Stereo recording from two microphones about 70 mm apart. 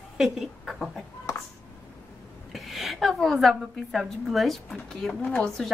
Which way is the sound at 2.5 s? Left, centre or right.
Centre.